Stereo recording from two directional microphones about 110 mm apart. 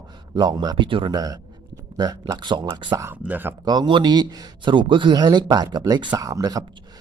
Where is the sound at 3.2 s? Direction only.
15° right (ahead or behind).